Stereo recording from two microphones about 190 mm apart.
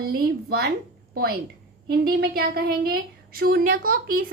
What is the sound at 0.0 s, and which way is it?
A woman's voice, 55° right (ahead or behind).